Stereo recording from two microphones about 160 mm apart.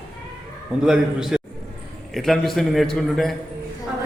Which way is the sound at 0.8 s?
5° right (ahead or behind).